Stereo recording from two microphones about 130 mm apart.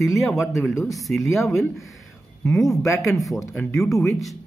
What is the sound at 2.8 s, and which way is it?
Speech, 20° left (ahead or behind).